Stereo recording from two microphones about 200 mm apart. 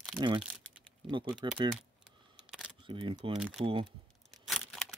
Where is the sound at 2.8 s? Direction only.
25° right (ahead or behind).